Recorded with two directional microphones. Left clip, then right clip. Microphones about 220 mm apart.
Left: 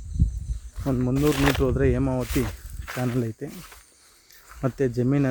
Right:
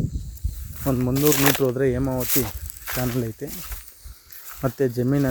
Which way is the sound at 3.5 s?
55° right (ahead or behind).